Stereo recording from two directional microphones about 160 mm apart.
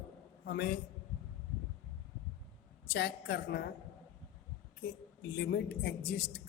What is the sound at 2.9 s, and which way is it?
Speech, 90° left.